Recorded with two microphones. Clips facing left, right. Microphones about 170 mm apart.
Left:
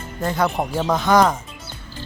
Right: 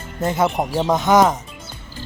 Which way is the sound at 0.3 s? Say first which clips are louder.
Right 2 dB; 20° right (ahead or behind).